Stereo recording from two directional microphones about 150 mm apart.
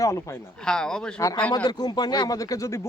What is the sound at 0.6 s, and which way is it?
Speech, 5° left (ahead or behind).